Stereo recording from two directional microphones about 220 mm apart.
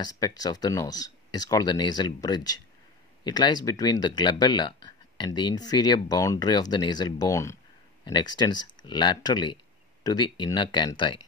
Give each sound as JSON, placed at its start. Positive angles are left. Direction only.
{"t": 0.0, "sound": "speech", "side_deg": 15}